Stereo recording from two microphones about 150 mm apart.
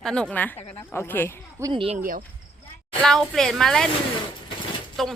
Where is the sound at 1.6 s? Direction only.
35° right (ahead or behind).